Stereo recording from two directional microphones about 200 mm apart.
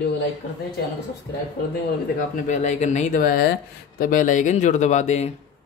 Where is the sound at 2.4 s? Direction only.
35° left (ahead or behind).